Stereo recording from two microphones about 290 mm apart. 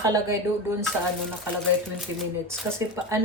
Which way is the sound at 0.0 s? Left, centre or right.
Centre.